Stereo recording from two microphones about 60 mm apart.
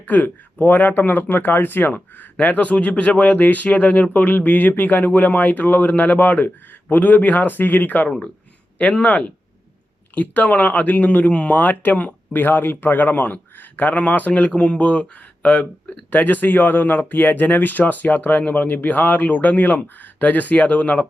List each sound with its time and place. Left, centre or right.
0.1 s speech: left
16.0 s speech: left